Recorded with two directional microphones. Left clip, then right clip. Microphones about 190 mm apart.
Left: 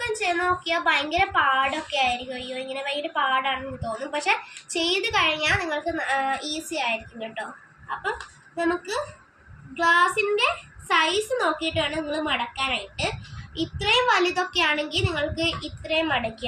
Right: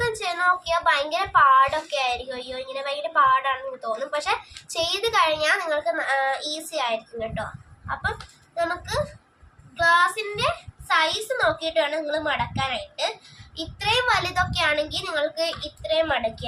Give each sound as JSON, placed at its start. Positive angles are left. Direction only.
{"t": 0.0, "sound": "a woman's voice", "side_deg": -30}
{"t": 9.7, "sound": "a child's voice", "side_deg": -35}